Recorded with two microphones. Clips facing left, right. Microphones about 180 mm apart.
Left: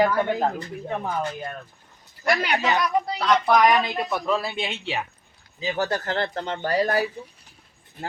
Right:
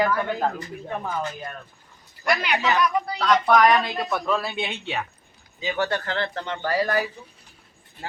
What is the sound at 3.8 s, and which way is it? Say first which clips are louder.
Speech: even; 5° left (ahead or behind).